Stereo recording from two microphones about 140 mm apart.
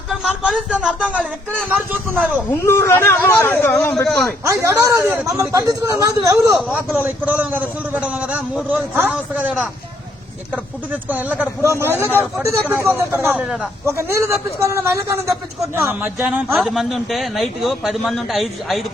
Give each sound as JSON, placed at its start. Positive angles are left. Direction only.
{"t": 0.1, "sound": "a man's voice", "side_deg": -5}
{"t": 2.5, "sound": "speech", "side_deg": 20}
{"t": 4.4, "sound": "a man's voice", "side_deg": -20}
{"t": 6.6, "sound": "a man's voice", "side_deg": -10}
{"t": 13.3, "sound": "a man's voice", "side_deg": -5}
{"t": 13.8, "sound": "a man's voice", "side_deg": -20}
{"t": 16.6, "sound": "a man's voice", "side_deg": -5}